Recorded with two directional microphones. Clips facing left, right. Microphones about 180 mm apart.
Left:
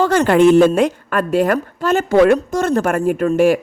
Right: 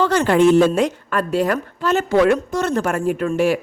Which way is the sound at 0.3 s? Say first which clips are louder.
Left 3 dB; 65° left (ahead or behind).